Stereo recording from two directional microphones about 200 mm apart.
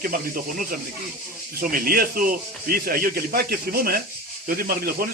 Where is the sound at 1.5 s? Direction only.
45° right (ahead or behind).